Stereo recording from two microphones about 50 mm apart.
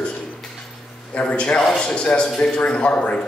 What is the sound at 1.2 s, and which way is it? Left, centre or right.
A man's voice, left.